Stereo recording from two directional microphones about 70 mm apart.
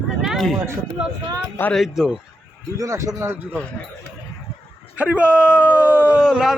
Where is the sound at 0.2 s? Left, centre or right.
Centre.